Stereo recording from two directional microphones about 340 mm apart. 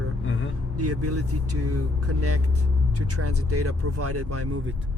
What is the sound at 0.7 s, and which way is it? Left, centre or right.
Speech, right.